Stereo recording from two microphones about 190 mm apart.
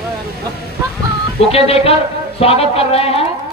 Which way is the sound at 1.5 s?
30° left (ahead or behind).